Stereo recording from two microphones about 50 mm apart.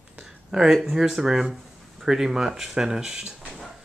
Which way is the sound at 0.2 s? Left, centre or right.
Centre.